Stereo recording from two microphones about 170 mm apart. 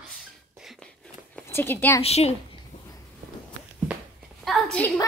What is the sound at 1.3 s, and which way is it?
Speech, 10° left (ahead or behind).